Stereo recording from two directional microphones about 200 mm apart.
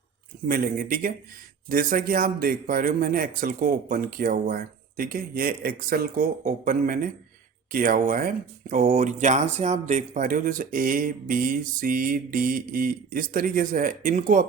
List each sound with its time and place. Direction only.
0.4 s speech: 45° right (ahead or behind)